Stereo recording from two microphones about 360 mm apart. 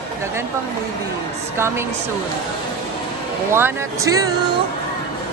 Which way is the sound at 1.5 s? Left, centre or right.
Centre.